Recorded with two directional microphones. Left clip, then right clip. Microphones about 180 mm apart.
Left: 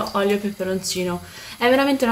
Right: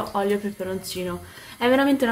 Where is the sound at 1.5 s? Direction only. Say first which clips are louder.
Left 2 dB; centre (ahead or behind).